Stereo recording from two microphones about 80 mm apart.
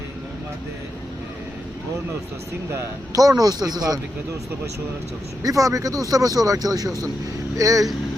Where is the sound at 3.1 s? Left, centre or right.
Right.